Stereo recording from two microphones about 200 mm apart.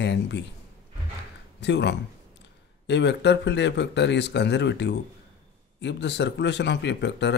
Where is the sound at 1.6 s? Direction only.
60° left (ahead or behind).